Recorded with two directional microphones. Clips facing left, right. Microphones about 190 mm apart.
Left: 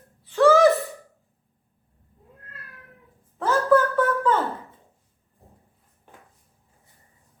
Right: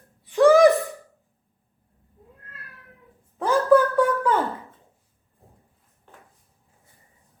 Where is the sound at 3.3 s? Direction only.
15° right (ahead or behind).